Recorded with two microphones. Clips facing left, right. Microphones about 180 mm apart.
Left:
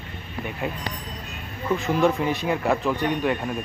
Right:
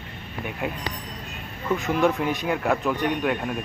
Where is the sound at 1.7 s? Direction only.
Centre (ahead or behind).